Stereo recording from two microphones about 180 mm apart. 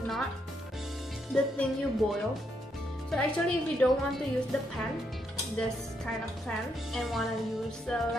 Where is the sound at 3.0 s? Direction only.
5° left (ahead or behind).